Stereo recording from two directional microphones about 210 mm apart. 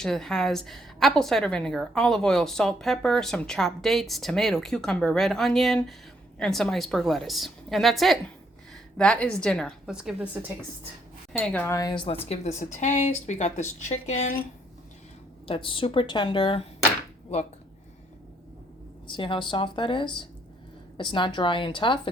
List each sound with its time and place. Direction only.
0.0 s a woman's voice: centre (ahead or behind)
11.3 s a woman's voice: 5° left (ahead or behind); by 14.4 s 35° left (ahead or behind)
15.4 s speech: 25° left (ahead or behind)
19.0 s speech: 25° left (ahead or behind)